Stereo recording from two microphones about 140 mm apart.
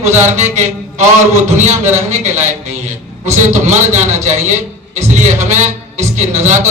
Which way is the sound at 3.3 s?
55° right (ahead or behind).